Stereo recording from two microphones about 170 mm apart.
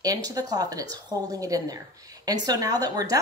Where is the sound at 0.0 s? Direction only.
20° right (ahead or behind).